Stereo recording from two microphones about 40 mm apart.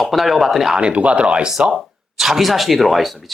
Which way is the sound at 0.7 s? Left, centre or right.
Right.